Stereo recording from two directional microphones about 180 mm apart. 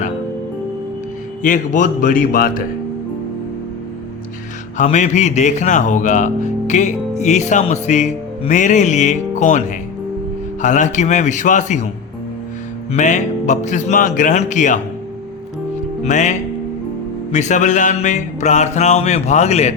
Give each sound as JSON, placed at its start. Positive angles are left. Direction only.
{"t": 1.4, "sound": "speech", "side_deg": 45}
{"t": 4.8, "sound": "speech", "side_deg": 40}
{"t": 12.9, "sound": "speech", "side_deg": 40}
{"t": 16.0, "sound": "speech", "side_deg": 40}